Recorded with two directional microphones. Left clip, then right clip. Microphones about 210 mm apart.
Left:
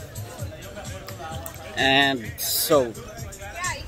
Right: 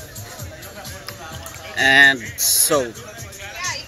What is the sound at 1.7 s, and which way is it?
Speech, 5° left (ahead or behind).